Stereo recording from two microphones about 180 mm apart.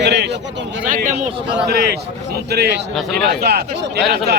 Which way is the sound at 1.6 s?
65° right (ahead or behind).